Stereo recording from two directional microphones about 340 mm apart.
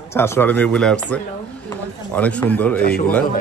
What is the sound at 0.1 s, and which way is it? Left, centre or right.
A man's voice, centre.